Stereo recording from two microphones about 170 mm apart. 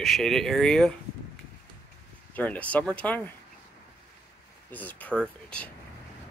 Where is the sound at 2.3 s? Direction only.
10° left (ahead or behind).